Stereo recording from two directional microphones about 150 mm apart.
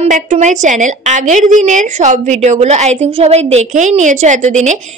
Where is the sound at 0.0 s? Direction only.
55° right (ahead or behind).